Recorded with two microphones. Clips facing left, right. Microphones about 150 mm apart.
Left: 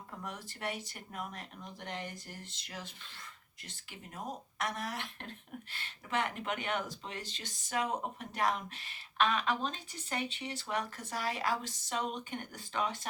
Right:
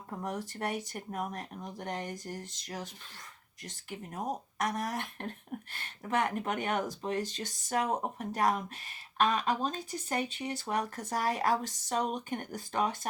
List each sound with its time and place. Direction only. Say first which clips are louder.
0.2 s speech: right 7 dB; 45° right (ahead or behind)